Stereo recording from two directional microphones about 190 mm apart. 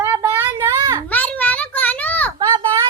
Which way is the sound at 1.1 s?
10° left (ahead or behind).